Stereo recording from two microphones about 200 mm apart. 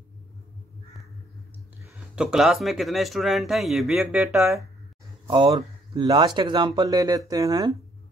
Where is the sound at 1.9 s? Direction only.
Centre (ahead or behind).